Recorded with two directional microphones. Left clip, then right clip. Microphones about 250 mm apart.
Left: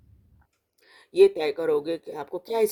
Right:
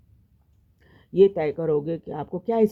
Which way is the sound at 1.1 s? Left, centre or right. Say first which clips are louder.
Even; left.